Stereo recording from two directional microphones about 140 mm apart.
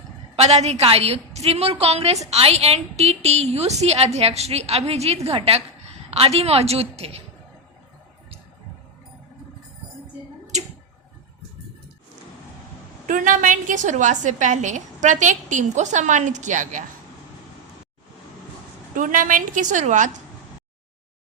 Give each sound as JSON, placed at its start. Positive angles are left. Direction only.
{"t": 0.3, "sound": "a woman's voice", "side_deg": -50}
{"t": 13.1, "sound": "a woman's voice", "side_deg": -70}
{"t": 18.9, "sound": "a woman's voice", "side_deg": -70}